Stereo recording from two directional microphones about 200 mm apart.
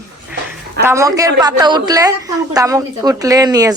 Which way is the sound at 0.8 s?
15° right (ahead or behind).